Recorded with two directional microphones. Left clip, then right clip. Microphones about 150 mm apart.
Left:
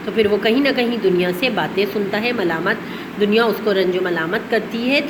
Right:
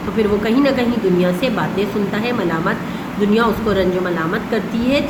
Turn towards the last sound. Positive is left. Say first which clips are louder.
# even
turn(degrees=20)  # may be behind; listen again after turning